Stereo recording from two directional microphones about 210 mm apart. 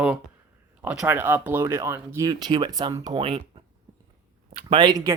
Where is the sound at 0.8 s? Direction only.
5° right (ahead or behind); by 3.6 s 25° right (ahead or behind).